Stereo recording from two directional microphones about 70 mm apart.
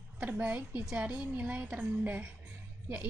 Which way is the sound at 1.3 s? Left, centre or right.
Centre.